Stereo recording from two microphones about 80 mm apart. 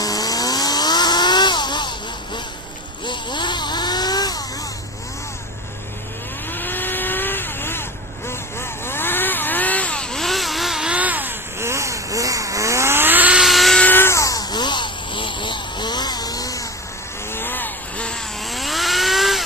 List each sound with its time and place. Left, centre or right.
0.0 s vehicle: left
6.5 s vehicle: left; by 11.3 s right
11.6 s vehicle: right
13.4 s vehicle: centre
13.7 s a sound: left
14.2 s a sound: left
14.5 s vehicle: left
17.3 s vehicle: left
18.4 s vehicle: centre